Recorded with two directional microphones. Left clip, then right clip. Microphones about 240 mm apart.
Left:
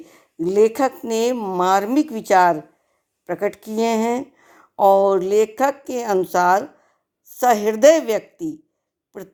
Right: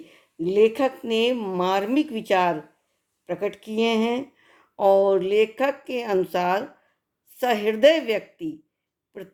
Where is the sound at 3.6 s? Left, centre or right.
Left.